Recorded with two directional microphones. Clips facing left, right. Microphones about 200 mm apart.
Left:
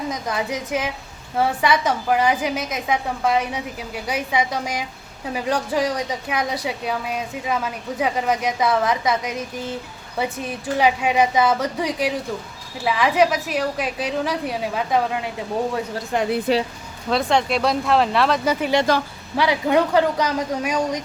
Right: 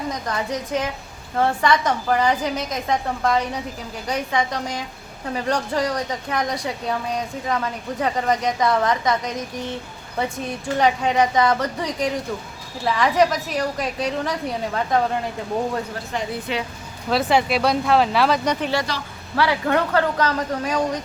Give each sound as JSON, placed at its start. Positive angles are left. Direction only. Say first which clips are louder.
{"t": 0.1, "sound": "a woman's voice", "louder": "left 1 dB", "side_deg": 10}
{"t": 10.8, "sound": "a woman's voice", "louder": "even", "side_deg": 10}
{"t": 16.1, "sound": "speech", "louder": "left 5 dB", "side_deg": 50}
{"t": 16.5, "sound": "speech", "louder": "left 7 dB", "side_deg": 40}
{"t": 17.1, "sound": "a woman's voice", "louder": "even", "side_deg": -5}
{"t": 18.9, "sound": "speech", "louder": "left 10 dB", "side_deg": 50}
{"t": 19.4, "sound": "a woman's voice", "louder": "left 2 dB", "side_deg": 15}